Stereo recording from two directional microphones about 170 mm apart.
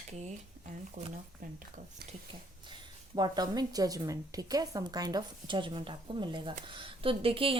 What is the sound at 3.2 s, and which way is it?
A woman's voice, 25° right (ahead or behind).